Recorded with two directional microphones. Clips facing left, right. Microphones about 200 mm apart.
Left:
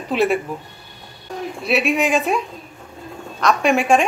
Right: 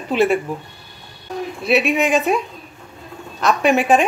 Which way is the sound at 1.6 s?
Centre (ahead or behind).